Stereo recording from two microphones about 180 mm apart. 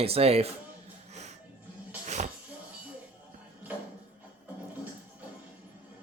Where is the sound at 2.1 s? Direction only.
40° right (ahead or behind).